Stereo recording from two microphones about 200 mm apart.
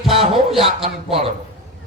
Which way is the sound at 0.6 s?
30° right (ahead or behind).